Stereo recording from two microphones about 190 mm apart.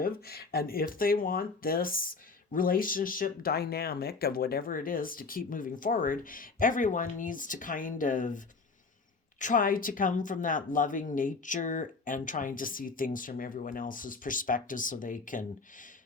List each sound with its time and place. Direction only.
0.0 s speech: 55° left (ahead or behind)